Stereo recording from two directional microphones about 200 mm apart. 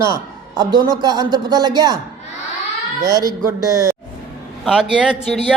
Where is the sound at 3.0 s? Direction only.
15° right (ahead or behind).